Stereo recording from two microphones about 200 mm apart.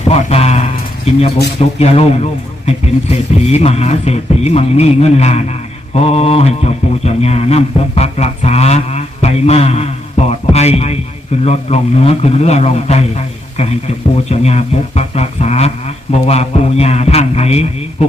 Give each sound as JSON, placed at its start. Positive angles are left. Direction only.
{"t": 0.1, "sound": "a man's voice", "side_deg": 30}
{"t": 1.8, "sound": "a man's voice", "side_deg": 30}
{"t": 14.3, "sound": "a man's voice", "side_deg": 35}